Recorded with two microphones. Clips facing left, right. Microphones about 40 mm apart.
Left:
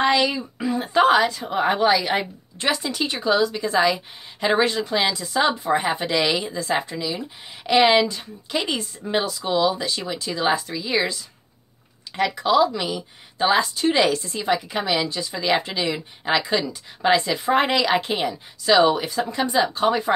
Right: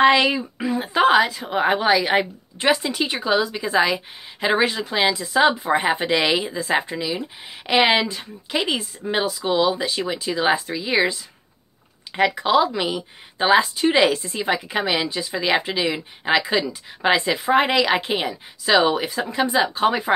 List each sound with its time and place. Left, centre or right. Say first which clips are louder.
0.0 s a woman's voice: right 4 dB; right
0.4 s a woman's voice: right 1 dB; centre
12.4 s a woman's voice: left 4 dB; centre
17.4 s a woman's voice: right 2 dB; centre